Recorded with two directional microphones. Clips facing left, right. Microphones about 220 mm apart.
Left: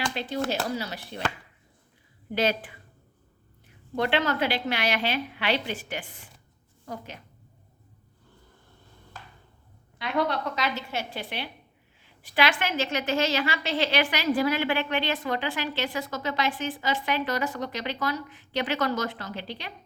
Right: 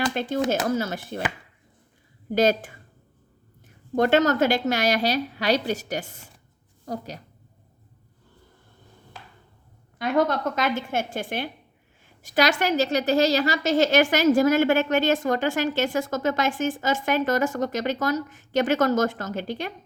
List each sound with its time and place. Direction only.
0.0 s a woman's voice: 50° right (ahead or behind)
2.3 s a woman's voice: 45° right (ahead or behind)
3.9 s a woman's voice: 45° right (ahead or behind)
10.0 s a woman's voice: 45° right (ahead or behind)